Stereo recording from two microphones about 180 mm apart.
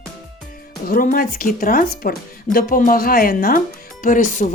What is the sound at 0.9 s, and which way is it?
Speech, 50° left (ahead or behind).